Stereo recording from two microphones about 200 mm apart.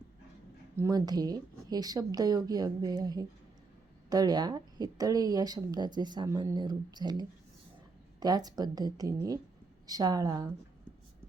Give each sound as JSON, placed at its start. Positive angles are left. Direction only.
{"t": 0.8, "sound": "a woman's voice", "side_deg": -20}